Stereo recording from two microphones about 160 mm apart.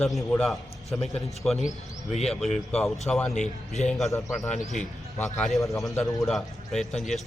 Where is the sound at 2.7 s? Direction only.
Centre (ahead or behind).